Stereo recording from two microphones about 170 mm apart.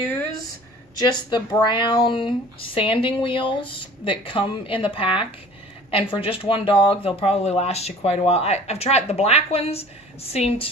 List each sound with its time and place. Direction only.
1.3 s speech: 25° left (ahead or behind)